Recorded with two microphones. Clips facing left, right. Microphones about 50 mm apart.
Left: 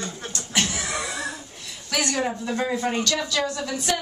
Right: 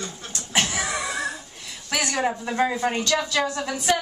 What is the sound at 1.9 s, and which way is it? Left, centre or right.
Speech, centre.